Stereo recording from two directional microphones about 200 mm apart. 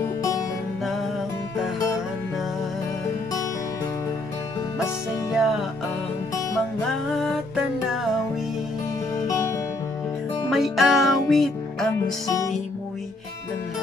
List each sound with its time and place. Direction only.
5.3 s music: centre (ahead or behind)
6.9 s music: centre (ahead or behind)
10.5 s music: centre (ahead or behind)